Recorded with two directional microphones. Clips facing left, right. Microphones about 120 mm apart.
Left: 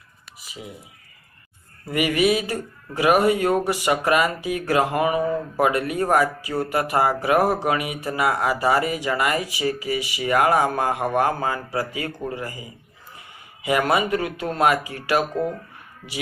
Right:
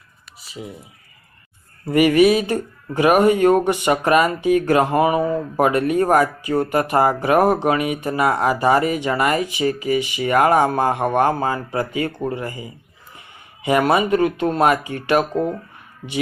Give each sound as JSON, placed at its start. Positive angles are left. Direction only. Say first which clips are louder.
{"t": 1.9, "sound": "speech", "louder": "right 6 dB", "side_deg": -35}
{"t": 13.7, "sound": "speech", "louder": "right 4 dB", "side_deg": -30}